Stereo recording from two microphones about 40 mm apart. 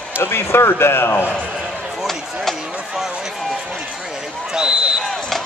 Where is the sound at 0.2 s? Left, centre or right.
Left.